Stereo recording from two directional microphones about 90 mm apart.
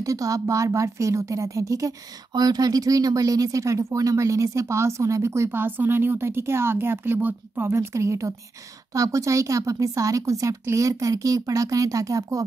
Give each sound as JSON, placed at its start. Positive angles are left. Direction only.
{"t": 0.0, "sound": "speech", "side_deg": -40}